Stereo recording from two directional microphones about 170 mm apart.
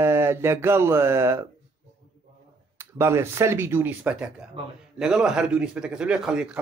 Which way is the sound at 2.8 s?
15° right (ahead or behind).